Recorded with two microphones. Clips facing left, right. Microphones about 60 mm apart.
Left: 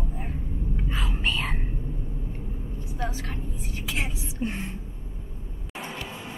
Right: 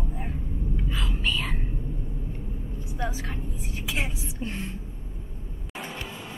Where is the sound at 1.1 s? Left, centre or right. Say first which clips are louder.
Left 1 dB; left.